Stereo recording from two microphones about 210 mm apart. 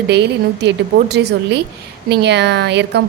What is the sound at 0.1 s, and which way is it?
Speech, 55° right (ahead or behind).